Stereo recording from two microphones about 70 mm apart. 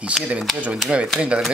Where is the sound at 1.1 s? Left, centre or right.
Centre.